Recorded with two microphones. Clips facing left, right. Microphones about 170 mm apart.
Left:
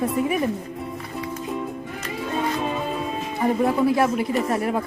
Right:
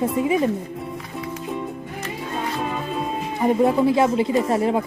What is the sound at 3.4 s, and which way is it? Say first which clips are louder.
Speech: right 2 dB; 20° right (ahead or behind).